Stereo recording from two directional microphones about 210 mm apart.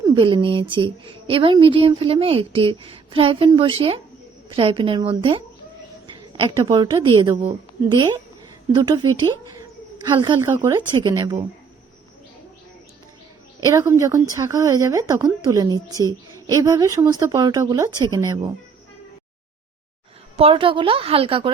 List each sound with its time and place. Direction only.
0.0 s a woman's voice: 20° right (ahead or behind)
13.6 s a woman's voice: 15° right (ahead or behind)
20.3 s a woman's voice: 25° right (ahead or behind)